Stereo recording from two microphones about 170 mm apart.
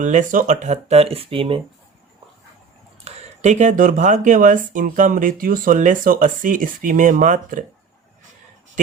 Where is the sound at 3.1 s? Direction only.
45° right (ahead or behind).